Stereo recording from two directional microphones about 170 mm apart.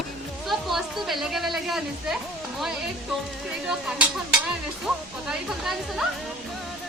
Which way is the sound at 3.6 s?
5° right (ahead or behind).